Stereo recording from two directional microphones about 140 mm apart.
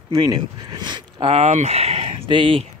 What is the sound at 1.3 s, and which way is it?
Speech, 50° right (ahead or behind).